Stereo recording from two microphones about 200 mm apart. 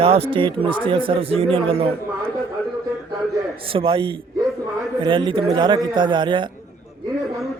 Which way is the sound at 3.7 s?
25° right (ahead or behind).